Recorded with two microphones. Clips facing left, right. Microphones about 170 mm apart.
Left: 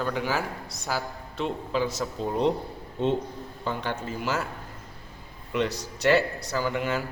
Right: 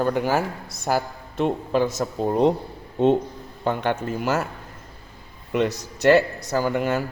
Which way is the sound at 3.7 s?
55° right (ahead or behind).